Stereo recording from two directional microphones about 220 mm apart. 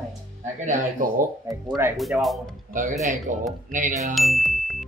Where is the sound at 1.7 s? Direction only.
Centre (ahead or behind).